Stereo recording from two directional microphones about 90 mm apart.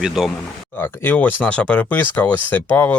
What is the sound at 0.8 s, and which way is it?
Speech, 20° left (ahead or behind).